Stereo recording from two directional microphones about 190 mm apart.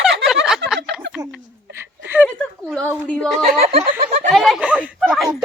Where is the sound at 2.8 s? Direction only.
10° right (ahead or behind).